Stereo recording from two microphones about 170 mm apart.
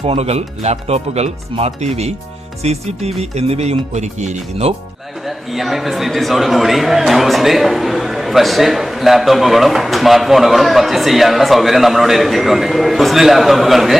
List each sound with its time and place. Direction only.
0.0 s speech: 35° right (ahead or behind)
5.2 s a man's voice: centre (ahead or behind)